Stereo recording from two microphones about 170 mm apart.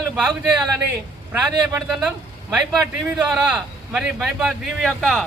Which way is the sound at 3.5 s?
5° right (ahead or behind).